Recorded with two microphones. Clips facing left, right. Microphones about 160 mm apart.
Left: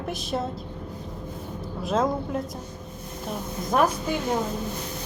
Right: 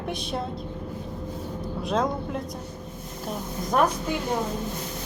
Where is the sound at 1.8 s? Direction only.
Centre (ahead or behind).